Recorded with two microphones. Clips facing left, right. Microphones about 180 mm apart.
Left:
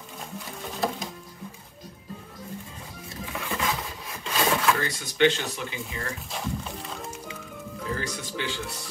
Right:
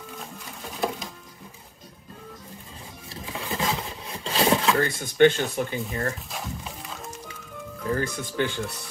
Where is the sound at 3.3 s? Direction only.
30° right (ahead or behind).